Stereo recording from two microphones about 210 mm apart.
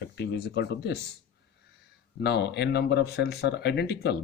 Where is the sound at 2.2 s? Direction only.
50° left (ahead or behind).